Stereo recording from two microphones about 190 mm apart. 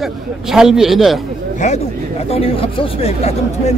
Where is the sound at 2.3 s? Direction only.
30° left (ahead or behind).